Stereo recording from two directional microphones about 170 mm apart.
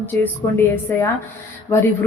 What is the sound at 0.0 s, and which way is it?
Speech, 10° left (ahead or behind).